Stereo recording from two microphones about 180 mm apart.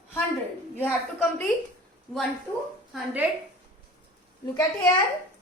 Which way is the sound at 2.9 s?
10° right (ahead or behind).